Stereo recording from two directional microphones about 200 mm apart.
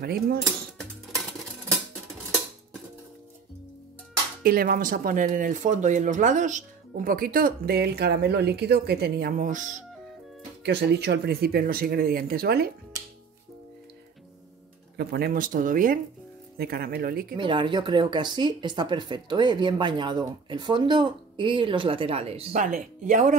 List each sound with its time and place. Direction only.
0.0 s speech: 50° right (ahead or behind)
4.4 s speech: 50° right (ahead or behind)
10.6 s speech: 55° right (ahead or behind)
15.0 s speech: 50° right (ahead or behind)
17.4 s speech: 25° right (ahead or behind)